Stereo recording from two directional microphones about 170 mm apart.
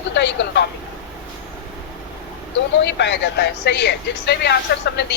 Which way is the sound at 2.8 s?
90° left.